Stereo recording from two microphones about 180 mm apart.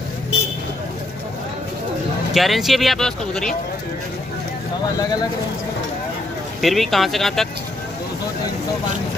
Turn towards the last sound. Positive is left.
turn(degrees=0)  # may be behind; listen again after turning